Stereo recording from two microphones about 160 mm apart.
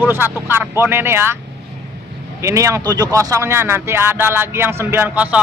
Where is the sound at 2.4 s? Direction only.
20° right (ahead or behind).